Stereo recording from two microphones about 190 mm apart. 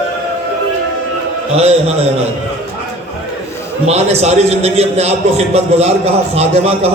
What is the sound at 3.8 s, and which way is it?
A man's voice, 35° right (ahead or behind).